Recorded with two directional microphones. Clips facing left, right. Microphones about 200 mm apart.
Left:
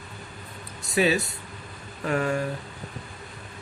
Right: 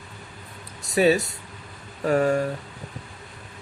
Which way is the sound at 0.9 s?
40° right (ahead or behind).